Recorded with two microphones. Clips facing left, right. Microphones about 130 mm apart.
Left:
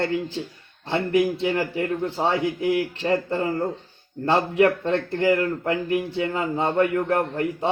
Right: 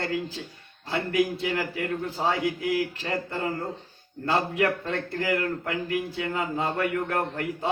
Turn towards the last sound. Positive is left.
turn(degrees=30)  # may be behind; listen again after turning